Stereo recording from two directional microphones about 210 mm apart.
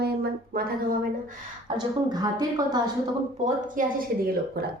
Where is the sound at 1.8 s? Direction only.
20° right (ahead or behind).